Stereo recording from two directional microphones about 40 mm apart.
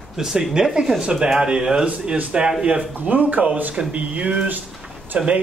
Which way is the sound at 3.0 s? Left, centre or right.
Right.